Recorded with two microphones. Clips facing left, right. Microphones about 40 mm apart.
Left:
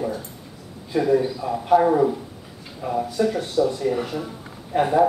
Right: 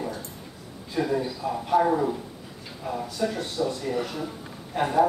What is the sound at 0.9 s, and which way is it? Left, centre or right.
Speech, centre.